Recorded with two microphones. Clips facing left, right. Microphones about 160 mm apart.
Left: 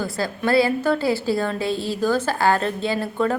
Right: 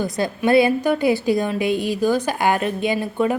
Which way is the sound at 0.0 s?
20° right (ahead or behind).